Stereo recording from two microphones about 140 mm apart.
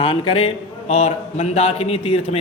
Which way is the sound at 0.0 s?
40° left (ahead or behind).